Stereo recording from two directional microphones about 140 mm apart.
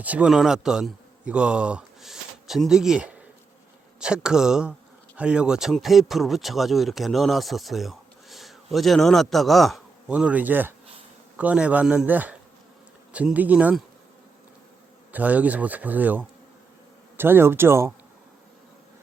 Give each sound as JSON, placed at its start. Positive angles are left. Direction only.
{"t": 0.0, "sound": "speech", "side_deg": -10}
{"t": 15.1, "sound": "speech", "side_deg": -10}